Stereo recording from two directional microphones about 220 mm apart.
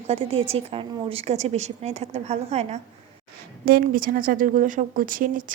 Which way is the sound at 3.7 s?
40° right (ahead or behind).